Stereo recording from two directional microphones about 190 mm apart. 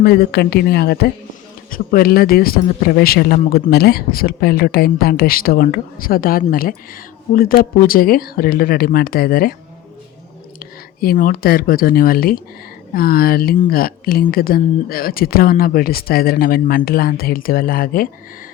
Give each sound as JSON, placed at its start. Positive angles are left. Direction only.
{"t": 0.0, "sound": "a woman's voice", "side_deg": 55}
{"t": 11.0, "sound": "a woman's voice", "side_deg": 50}